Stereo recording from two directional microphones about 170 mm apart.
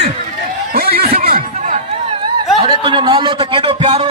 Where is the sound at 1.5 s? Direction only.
45° right (ahead or behind).